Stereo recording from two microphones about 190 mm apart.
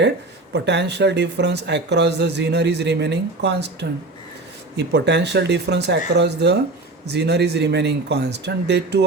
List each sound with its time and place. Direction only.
0.5 s speech: 65° right (ahead or behind)
4.9 s speech: 65° right (ahead or behind)